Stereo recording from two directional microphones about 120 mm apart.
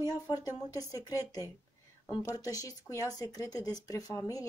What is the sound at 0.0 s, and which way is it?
Speech, 35° left (ahead or behind).